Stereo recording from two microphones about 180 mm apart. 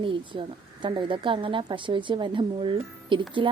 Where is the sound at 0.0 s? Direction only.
30° right (ahead or behind).